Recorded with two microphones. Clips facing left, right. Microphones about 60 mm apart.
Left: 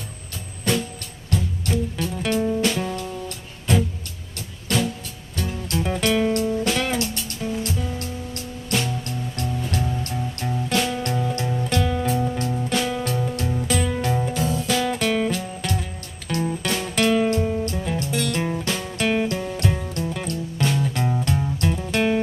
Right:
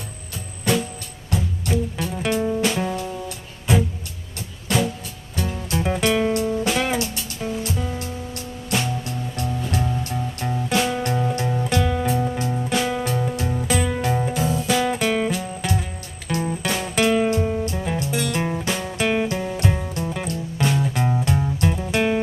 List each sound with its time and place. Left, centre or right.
1.3 s music: centre
8.6 s music: centre
14.3 s music: centre